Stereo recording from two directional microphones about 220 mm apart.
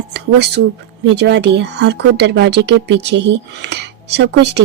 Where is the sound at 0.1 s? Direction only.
50° right (ahead or behind).